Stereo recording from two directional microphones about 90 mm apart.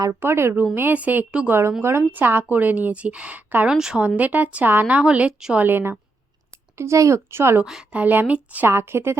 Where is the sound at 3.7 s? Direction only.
5° right (ahead or behind).